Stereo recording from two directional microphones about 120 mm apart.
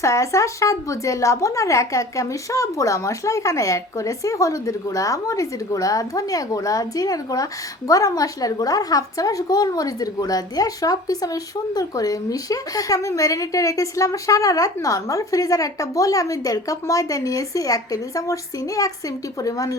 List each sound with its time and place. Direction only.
0.0 s a woman's voice: 25° left (ahead or behind)